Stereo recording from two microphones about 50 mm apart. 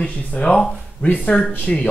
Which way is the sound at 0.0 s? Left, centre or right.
Left.